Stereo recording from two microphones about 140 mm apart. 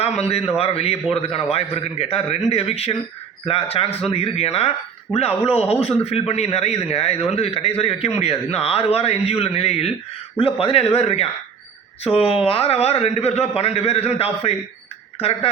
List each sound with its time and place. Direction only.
0.0 s a man's voice: 45° left (ahead or behind)